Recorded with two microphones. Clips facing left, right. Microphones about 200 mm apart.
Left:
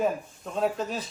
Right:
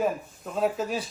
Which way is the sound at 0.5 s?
5° right (ahead or behind).